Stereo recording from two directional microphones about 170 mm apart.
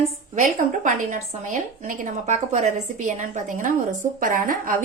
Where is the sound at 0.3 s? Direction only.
50° right (ahead or behind).